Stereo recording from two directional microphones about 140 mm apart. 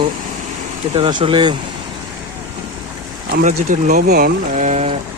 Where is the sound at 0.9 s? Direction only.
40° right (ahead or behind).